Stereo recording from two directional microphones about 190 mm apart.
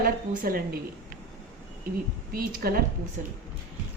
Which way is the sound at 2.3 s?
50° right (ahead or behind).